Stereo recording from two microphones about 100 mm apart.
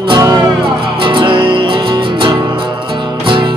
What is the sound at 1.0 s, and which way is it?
Music, 55° right (ahead or behind).